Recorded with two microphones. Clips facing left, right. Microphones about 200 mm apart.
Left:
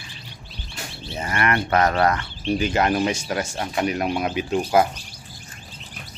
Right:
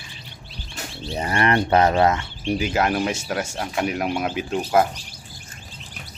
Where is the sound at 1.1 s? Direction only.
35° right (ahead or behind).